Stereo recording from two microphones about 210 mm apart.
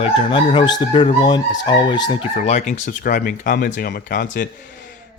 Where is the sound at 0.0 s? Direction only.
25° left (ahead or behind).